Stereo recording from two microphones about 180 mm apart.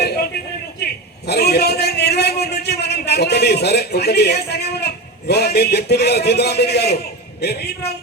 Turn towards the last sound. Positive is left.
turn(degrees=65)  # may be behind; listen again after turning